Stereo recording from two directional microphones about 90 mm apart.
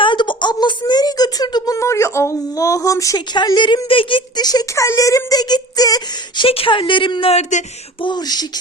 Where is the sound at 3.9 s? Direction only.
75° left (ahead or behind).